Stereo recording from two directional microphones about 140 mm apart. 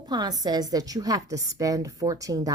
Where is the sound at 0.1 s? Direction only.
30° right (ahead or behind).